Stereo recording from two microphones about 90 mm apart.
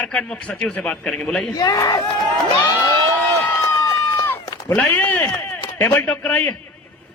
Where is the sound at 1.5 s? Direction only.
45° left (ahead or behind).